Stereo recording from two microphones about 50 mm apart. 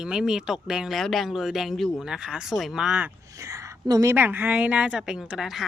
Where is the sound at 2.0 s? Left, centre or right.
Centre.